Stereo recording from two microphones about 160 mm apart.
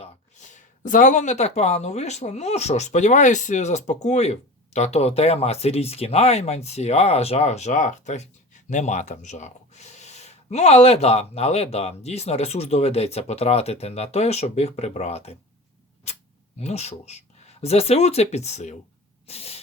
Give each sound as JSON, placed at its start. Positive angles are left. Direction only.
{"t": 0.0, "sound": "speech", "side_deg": 50}
{"t": 16.6, "sound": "speech", "side_deg": 45}
{"t": 19.3, "sound": "spray", "side_deg": 40}